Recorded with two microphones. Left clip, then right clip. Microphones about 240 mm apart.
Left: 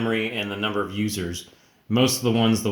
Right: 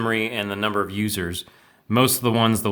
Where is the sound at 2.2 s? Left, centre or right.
Right.